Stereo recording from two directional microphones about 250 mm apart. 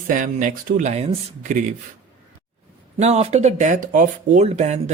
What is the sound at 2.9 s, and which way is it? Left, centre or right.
Speech, right.